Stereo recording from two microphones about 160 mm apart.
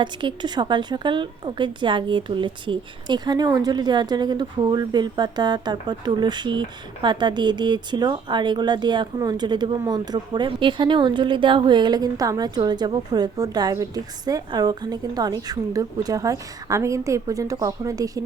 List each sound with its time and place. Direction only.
0.0 s a woman's voice: 30° right (ahead or behind)